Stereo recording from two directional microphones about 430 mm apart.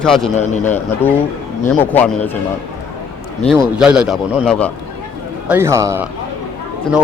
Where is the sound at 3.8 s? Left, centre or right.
Centre.